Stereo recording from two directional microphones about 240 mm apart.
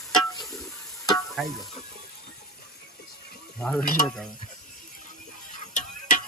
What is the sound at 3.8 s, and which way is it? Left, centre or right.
Stir, left.